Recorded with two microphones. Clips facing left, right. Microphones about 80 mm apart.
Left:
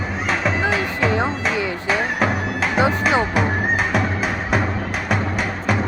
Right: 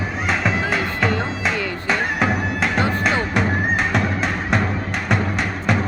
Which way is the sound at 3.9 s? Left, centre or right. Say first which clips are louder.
Even; centre.